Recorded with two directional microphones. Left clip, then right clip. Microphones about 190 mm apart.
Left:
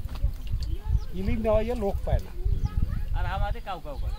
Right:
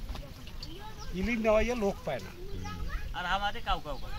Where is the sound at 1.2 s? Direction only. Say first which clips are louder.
Left 1 dB; 10° left (ahead or behind).